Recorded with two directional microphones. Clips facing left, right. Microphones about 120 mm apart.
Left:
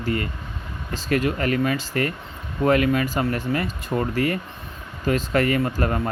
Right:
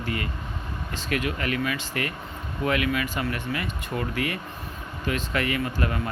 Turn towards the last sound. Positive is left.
turn(degrees=45)  # may be behind; listen again after turning